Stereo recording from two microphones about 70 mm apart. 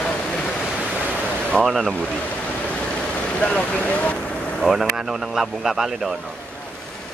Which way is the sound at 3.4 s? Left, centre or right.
Centre.